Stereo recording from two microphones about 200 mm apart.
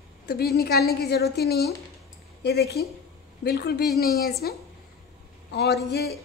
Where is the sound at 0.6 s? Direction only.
50° left (ahead or behind).